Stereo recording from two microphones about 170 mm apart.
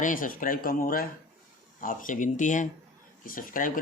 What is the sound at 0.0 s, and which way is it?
Speech, 50° left (ahead or behind).